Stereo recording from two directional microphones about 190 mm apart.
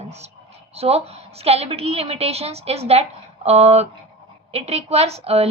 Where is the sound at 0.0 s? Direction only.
35° right (ahead or behind).